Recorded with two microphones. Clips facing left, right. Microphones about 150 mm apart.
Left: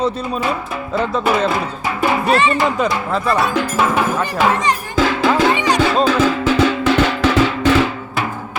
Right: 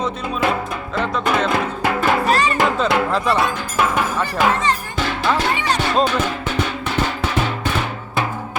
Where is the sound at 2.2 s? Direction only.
40° right (ahead or behind).